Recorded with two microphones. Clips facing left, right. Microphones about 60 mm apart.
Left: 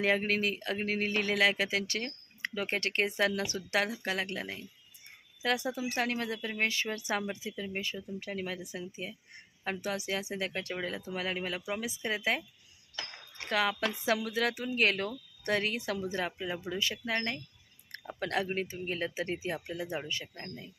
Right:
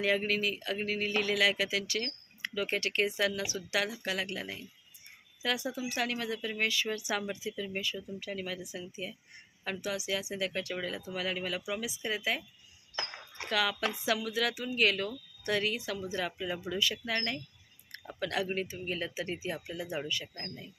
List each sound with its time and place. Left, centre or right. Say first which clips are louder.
0.0 s speech: left 1 dB; left
13.0 s a sound: right 3 dB; right
13.5 s a woman's voice: left 1 dB; left
16.1 s speech: even; left
17.1 s speech: left 1 dB; centre
18.2 s speech: left 1 dB; left
18.4 s speech: even; left
18.7 s speech: left 1 dB; left
20.3 s speech: even; centre